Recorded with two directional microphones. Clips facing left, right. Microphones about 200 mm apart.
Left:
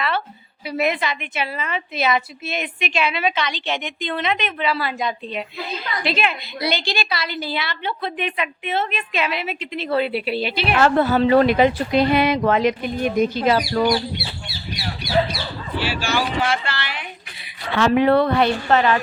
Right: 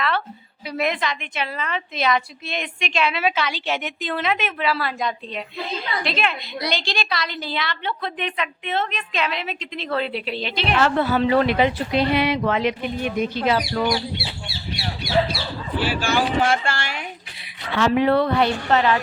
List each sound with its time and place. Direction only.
0.7 s a woman's voice: 5° left (ahead or behind)
10.8 s speech: 45° left (ahead or behind)
14.2 s bird: 30° right (ahead or behind)
15.8 s speech: 50° right (ahead or behind)
17.7 s a woman's voice: 60° left (ahead or behind)